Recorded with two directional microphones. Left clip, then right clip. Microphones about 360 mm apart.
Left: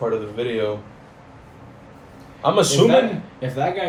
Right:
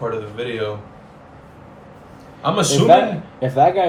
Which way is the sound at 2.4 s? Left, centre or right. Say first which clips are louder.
Left 2 dB; centre.